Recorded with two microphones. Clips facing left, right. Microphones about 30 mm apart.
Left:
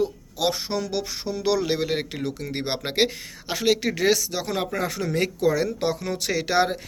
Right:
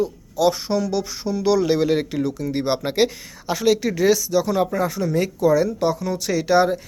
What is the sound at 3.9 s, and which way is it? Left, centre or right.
Speech, left.